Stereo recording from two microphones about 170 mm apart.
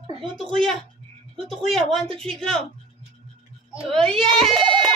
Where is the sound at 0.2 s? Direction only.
Centre (ahead or behind).